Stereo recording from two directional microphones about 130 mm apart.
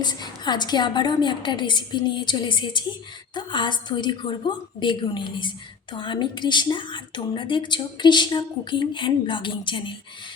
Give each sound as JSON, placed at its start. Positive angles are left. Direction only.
{"t": 0.0, "sound": "a woman's voice", "side_deg": 35}